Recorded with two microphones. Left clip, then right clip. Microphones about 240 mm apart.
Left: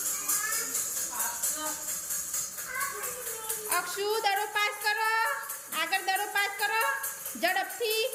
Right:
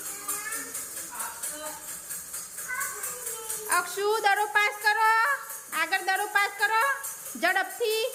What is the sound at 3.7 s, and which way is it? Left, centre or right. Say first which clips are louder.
Speech: right 4 dB; centre.